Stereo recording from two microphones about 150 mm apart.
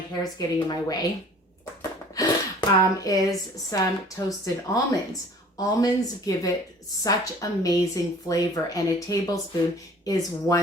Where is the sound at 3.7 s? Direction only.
20° left (ahead or behind).